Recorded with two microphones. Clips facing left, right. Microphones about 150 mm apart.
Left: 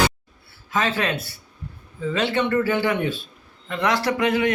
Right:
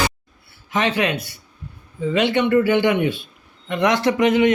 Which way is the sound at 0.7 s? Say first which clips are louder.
Right 3 dB; 20° right (ahead or behind).